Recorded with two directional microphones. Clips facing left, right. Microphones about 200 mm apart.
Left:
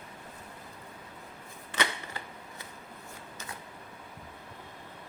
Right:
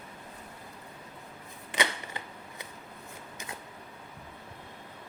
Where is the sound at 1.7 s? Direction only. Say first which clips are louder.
Right 1 dB; 15° right (ahead or behind).